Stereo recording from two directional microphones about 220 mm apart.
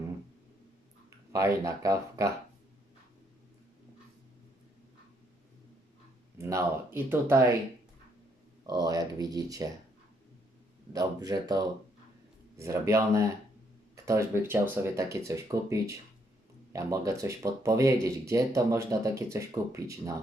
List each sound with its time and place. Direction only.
1.3 s speech: 15° right (ahead or behind)
6.4 s speech: 10° right (ahead or behind)
8.6 s speech: 15° right (ahead or behind)
10.9 s speech: 15° right (ahead or behind)